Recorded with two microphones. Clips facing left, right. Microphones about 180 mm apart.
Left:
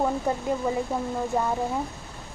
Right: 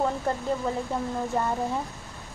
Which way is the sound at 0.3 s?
10° left (ahead or behind).